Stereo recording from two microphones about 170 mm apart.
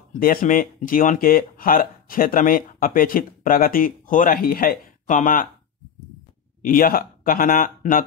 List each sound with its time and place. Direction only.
0.2 s speech: 55° left (ahead or behind)
6.6 s speech: 55° left (ahead or behind)